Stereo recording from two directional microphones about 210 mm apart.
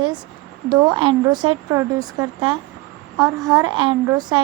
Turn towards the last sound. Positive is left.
turn(degrees=-20)  # may be behind; listen again after turning